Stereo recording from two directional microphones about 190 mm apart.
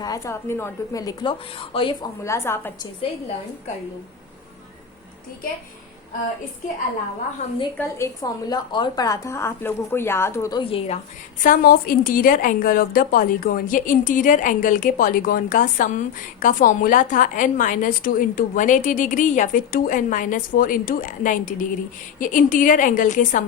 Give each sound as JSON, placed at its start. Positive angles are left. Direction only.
{"t": 0.0, "sound": "a woman's voice", "side_deg": 15}
{"t": 2.2, "sound": "speech", "side_deg": 15}
{"t": 7.4, "sound": "a woman's voice", "side_deg": 35}
{"t": 7.8, "sound": "speech", "side_deg": 15}
{"t": 11.4, "sound": "a woman's voice", "side_deg": 50}